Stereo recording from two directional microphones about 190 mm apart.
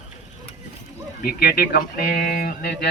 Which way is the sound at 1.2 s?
55° left (ahead or behind).